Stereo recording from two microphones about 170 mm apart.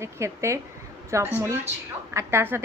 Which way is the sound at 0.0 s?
15° right (ahead or behind).